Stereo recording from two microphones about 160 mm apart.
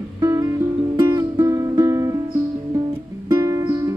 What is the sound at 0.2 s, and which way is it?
Music, 25° right (ahead or behind).